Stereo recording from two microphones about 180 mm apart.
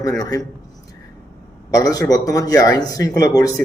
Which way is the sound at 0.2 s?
20° left (ahead or behind).